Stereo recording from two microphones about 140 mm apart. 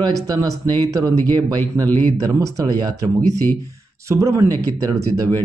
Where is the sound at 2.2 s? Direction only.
25° right (ahead or behind).